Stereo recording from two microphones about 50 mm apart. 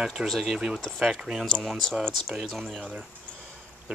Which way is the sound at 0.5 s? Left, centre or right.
Centre.